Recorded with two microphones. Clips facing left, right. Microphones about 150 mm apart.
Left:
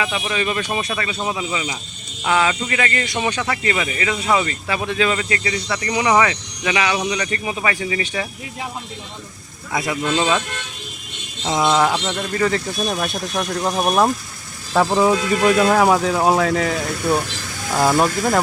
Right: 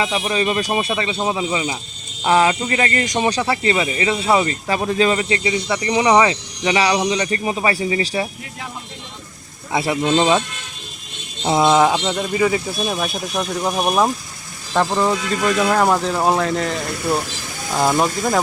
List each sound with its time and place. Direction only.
0.0 s speech: 35° right (ahead or behind)
5.3 s speech: 25° right (ahead or behind)
9.7 s speech: 30° right (ahead or behind)
11.4 s speech: 25° right (ahead or behind); by 14.1 s 5° right (ahead or behind)
14.7 s speech: 10° left (ahead or behind)